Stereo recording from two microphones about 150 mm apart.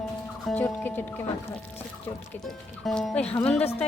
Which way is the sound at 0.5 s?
10° left (ahead or behind).